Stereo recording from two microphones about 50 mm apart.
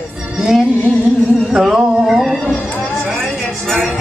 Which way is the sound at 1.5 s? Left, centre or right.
Centre.